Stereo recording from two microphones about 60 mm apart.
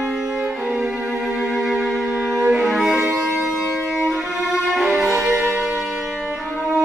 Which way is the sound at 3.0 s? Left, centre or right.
Centre.